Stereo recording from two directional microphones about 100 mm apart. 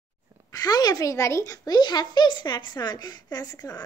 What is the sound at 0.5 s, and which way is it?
A woman's voice, 40° left (ahead or behind).